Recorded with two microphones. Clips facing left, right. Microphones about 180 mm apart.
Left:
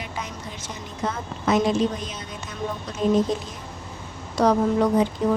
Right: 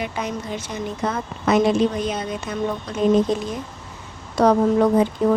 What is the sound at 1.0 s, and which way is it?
A woman's voice, 65° right (ahead or behind).